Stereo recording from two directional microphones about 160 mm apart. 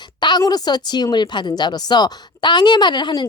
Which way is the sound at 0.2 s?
25° left (ahead or behind).